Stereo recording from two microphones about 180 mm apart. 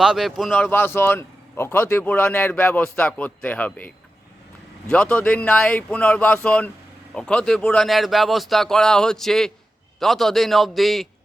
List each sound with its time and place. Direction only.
0.0 s speech: 5° right (ahead or behind)
0.5 s speech: 10° left (ahead or behind)